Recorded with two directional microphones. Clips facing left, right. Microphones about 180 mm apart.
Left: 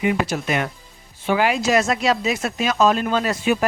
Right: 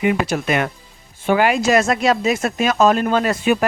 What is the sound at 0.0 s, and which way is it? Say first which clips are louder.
Speech: right 3 dB; 65° right (ahead or behind).